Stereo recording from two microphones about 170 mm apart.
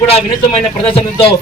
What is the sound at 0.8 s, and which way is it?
Speech, 35° left (ahead or behind).